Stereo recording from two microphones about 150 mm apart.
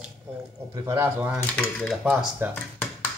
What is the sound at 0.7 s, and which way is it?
Speech, 20° right (ahead or behind).